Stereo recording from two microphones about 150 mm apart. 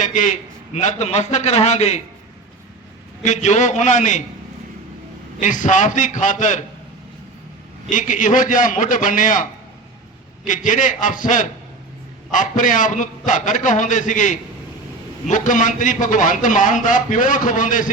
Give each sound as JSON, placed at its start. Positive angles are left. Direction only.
{"t": 0.0, "sound": "a man's voice", "side_deg": 55}
{"t": 3.2, "sound": "a man's voice", "side_deg": 50}
{"t": 5.4, "sound": "a man's voice", "side_deg": 60}
{"t": 7.9, "sound": "a man's voice", "side_deg": 60}